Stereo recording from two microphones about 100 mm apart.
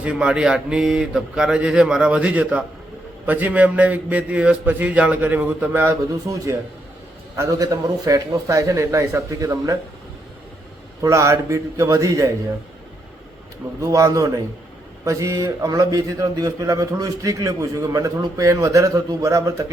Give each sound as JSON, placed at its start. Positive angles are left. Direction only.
{"t": 0.0, "sound": "a man's voice", "side_deg": -10}
{"t": 6.2, "sound": "a man's voice", "side_deg": -35}
{"t": 11.0, "sound": "a man's voice", "side_deg": -30}
{"t": 13.8, "sound": "a man's voice", "side_deg": -35}